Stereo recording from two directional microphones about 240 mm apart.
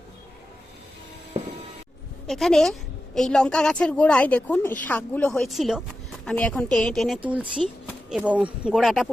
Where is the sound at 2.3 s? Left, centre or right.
Centre.